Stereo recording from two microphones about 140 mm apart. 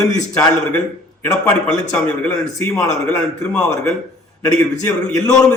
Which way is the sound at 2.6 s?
5° left (ahead or behind).